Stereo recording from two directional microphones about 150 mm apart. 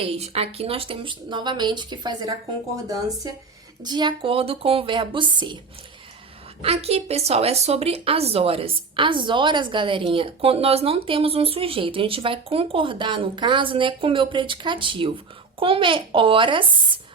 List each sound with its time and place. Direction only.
0.0 s a woman's voice: 40° right (ahead or behind)
6.6 s a woman's voice: 40° right (ahead or behind)